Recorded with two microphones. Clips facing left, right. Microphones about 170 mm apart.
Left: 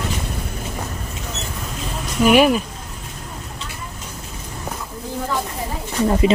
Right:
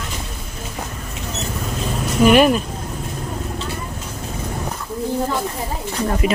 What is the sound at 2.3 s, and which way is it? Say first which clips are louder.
Speech: even; 5° left (ahead or behind).